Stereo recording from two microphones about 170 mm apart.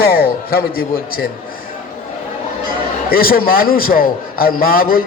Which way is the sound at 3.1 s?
60° left (ahead or behind).